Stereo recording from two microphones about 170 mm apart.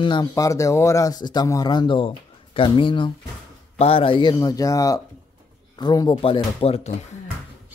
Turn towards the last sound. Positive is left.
turn(degrees=35)  # may be behind; listen again after turning